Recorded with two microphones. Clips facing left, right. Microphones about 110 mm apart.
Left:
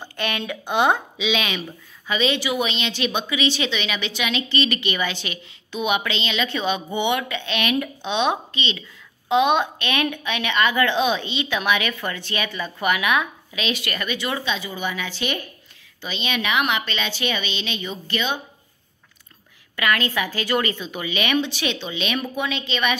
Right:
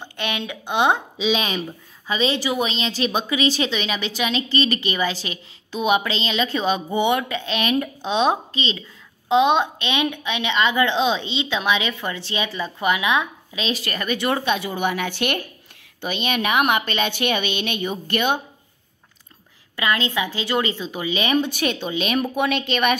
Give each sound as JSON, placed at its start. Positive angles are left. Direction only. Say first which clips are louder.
{"t": 0.0, "sound": "speech", "louder": "even", "side_deg": -20}
{"t": 1.1, "sound": "a woman's voice", "louder": "right 2 dB", "side_deg": -35}
{"t": 14.1, "sound": "a woman's voice", "louder": "right 6 dB", "side_deg": -50}
{"t": 19.7, "sound": "a woman's voice", "louder": "even", "side_deg": -25}
{"t": 21.4, "sound": "a woman's voice", "louder": "right 2 dB", "side_deg": -50}
{"t": 22.4, "sound": "a woman's voice", "louder": "right 4 dB", "side_deg": -55}